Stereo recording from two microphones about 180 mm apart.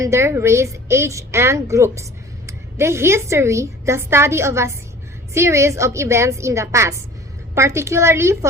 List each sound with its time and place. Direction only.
0.0 s a woman's voice: 15° right (ahead or behind)